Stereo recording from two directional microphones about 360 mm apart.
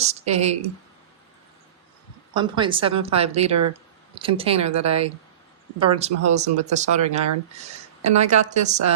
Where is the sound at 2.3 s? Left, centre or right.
Centre.